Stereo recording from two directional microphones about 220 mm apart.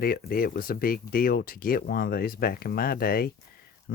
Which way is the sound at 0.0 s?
40° left (ahead or behind).